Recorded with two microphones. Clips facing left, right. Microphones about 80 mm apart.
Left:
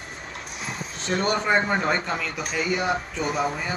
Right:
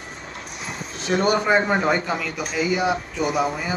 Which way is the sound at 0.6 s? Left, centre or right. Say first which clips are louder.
Right 1 dB; centre.